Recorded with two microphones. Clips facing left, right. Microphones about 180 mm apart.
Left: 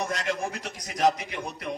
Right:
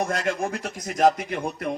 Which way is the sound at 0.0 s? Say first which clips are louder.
Right 4 dB; 50° right (ahead or behind).